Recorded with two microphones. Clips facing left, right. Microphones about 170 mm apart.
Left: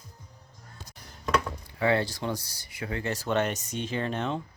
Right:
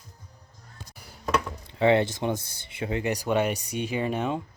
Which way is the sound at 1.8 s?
20° right (ahead or behind).